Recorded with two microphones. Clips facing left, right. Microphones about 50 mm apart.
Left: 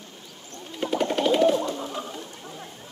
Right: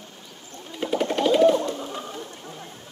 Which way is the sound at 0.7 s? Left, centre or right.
Centre.